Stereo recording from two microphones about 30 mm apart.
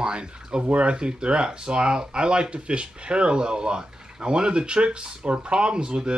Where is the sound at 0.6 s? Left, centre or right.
Right.